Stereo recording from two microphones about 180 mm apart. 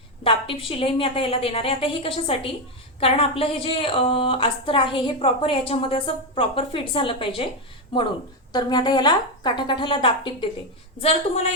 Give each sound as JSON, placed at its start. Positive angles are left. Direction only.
{"t": 0.3, "sound": "a woman's voice", "side_deg": 30}
{"t": 8.5, "sound": "a woman's voice", "side_deg": 25}